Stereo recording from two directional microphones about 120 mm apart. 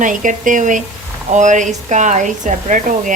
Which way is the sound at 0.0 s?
90° right.